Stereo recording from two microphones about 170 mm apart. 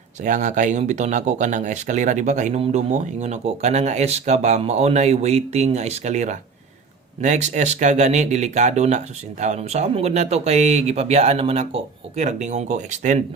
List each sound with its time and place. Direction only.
0.2 s speech: 45° right (ahead or behind)